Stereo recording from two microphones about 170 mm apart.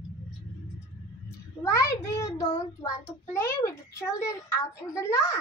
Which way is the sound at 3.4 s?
15° left (ahead or behind).